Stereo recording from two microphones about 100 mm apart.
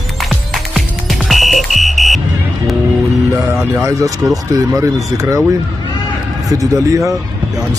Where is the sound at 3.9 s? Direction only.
35° right (ahead or behind).